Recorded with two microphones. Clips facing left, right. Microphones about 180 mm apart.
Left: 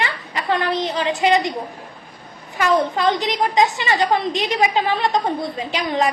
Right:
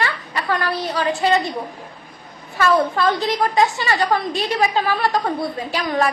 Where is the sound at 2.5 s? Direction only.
20° left (ahead or behind).